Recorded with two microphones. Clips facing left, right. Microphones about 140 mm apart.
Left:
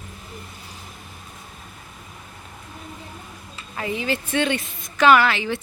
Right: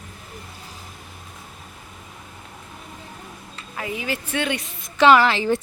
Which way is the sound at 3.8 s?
5° right (ahead or behind).